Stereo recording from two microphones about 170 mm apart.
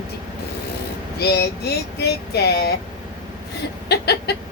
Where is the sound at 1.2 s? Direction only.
70° left (ahead or behind).